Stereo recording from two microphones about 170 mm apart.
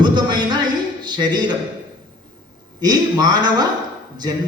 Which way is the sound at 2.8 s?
25° right (ahead or behind).